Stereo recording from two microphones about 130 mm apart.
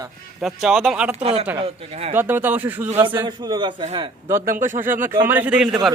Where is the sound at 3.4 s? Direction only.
35° right (ahead or behind).